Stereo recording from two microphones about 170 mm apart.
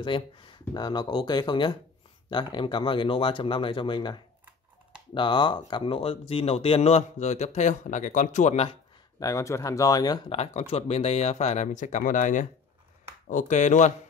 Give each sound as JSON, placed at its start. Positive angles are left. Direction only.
{"t": 0.0, "sound": "speech", "side_deg": 30}
{"t": 9.2, "sound": "speech", "side_deg": 20}
{"t": 10.3, "sound": "speech", "side_deg": 35}